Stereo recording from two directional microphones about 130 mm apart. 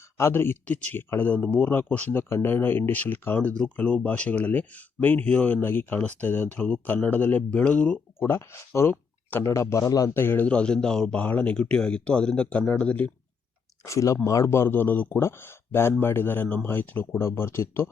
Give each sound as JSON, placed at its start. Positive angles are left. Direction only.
{"t": 0.2, "sound": "speech", "side_deg": 20}
{"t": 13.8, "sound": "speech", "side_deg": 25}